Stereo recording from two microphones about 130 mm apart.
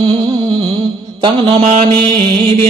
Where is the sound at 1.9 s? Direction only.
40° right (ahead or behind).